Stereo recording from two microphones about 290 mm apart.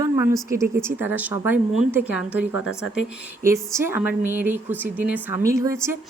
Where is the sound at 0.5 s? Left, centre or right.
Centre.